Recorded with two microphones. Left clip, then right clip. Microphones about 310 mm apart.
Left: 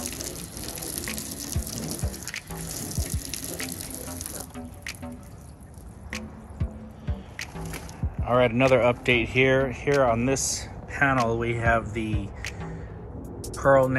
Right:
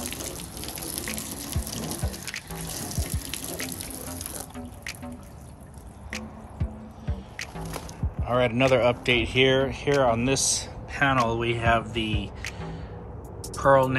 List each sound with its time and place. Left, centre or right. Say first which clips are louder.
0.7 s water: even; centre
1.7 s water: right 3 dB; centre
2.8 s water: even; right
3.3 s water: right 1 dB; centre
6.0 s music: even; centre
8.2 s speech: left 2 dB; centre
10.9 s a sound: left 1 dB; centre
11.2 s speech: even; centre
12.4 s music: even; centre
13.4 s a sound: even; centre